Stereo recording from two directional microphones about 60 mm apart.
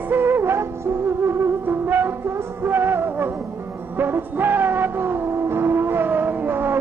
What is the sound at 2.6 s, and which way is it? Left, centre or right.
Music, right.